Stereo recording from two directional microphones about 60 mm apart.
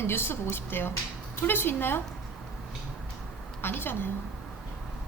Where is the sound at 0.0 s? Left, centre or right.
Left.